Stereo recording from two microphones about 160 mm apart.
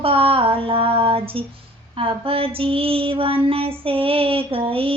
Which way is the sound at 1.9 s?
35° right (ahead or behind).